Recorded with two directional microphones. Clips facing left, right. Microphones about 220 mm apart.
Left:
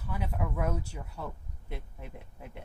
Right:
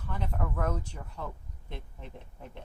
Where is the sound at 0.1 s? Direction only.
10° left (ahead or behind).